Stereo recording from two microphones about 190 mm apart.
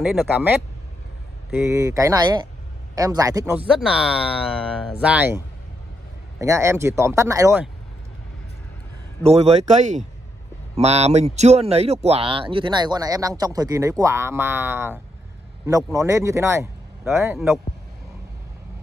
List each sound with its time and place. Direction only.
0.1 s speech: 10° right (ahead or behind)
6.4 s speech: 15° right (ahead or behind)
9.2 s speech: 35° right (ahead or behind); by 17.4 s 15° right (ahead or behind)